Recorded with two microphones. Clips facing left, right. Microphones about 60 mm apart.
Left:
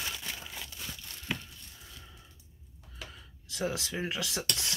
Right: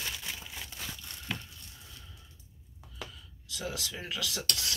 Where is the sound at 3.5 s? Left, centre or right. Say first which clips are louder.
Left 4 dB; left.